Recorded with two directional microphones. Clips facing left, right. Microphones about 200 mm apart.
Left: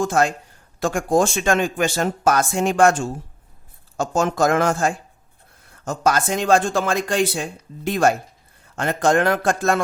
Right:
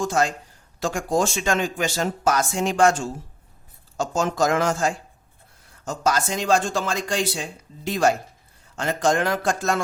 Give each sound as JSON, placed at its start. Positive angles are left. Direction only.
{"t": 0.0, "sound": "speech", "side_deg": 55}